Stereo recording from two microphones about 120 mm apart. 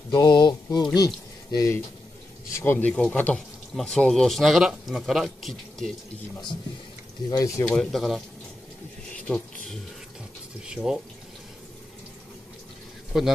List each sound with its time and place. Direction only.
0.1 s speech: 35° left (ahead or behind)
2.5 s speech: 20° left (ahead or behind); by 5.9 s centre (ahead or behind)
7.2 s speech: 30° left (ahead or behind)
7.6 s speech: 5° left (ahead or behind)
9.1 s a sound: 5° left (ahead or behind)
10.7 s speech: 5° right (ahead or behind)
13.1 s speech: 5° right (ahead or behind)